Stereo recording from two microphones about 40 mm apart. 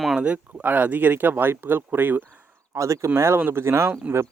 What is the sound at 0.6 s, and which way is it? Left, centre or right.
Speech, right.